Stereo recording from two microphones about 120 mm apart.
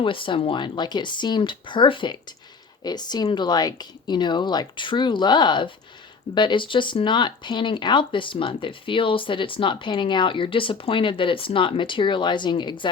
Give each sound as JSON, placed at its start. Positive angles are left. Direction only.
{"t": 0.0, "sound": "speech", "side_deg": 45}